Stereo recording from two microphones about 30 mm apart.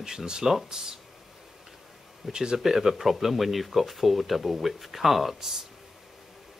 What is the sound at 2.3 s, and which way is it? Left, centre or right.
Speech, right.